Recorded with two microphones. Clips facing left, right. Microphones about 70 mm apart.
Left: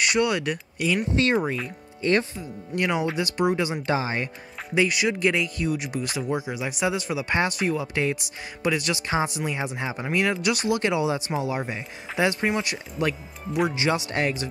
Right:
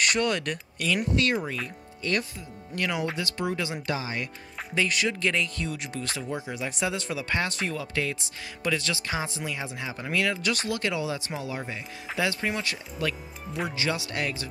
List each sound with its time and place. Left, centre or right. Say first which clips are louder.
0.0 s speech: left 3 dB; centre
1.1 s speech: left 4 dB; left
2.7 s speech: left 4 dB; left
4.7 s speech: left 4 dB; centre